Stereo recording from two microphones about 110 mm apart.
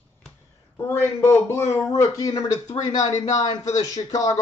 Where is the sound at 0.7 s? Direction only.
20° left (ahead or behind).